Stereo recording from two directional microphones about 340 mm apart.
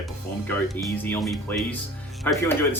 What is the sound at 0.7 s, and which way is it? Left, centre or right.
Speech, centre.